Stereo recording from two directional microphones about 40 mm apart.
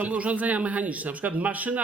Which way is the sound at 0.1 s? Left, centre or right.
Right.